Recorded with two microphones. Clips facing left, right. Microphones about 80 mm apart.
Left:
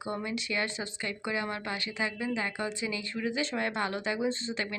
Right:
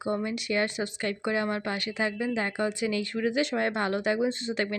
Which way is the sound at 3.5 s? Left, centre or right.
Right.